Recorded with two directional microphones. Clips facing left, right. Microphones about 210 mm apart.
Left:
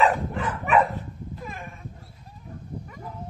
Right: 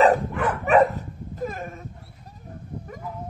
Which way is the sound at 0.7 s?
40° right (ahead or behind).